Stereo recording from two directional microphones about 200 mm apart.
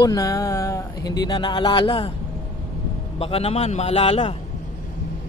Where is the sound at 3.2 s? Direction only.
30° left (ahead or behind).